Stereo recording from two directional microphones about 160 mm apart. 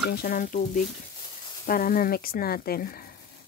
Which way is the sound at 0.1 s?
65° left (ahead or behind).